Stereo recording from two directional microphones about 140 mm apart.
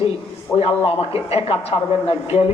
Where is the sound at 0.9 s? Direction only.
45° left (ahead or behind).